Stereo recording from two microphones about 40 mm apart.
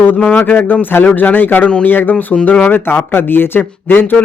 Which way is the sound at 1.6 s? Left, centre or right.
Left.